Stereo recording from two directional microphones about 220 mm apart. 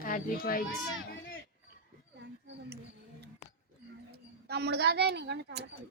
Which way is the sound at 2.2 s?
50° right (ahead or behind).